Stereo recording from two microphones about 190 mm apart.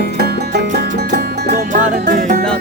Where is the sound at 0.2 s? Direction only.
60° right (ahead or behind).